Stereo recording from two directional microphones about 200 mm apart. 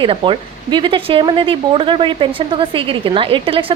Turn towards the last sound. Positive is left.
turn(degrees=-25)  # may be behind; listen again after turning